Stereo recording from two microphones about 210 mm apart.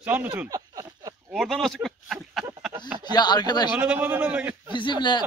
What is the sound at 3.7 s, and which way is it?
A man's voice, 5° right (ahead or behind).